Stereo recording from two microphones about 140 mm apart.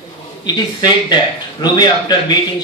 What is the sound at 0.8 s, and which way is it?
A man's voice, 30° left (ahead or behind).